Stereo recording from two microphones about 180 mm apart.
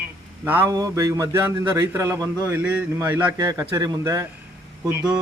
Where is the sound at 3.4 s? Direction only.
20° right (ahead or behind).